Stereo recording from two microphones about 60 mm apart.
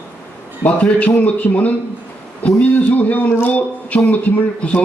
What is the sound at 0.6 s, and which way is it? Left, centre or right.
A man's voice, left.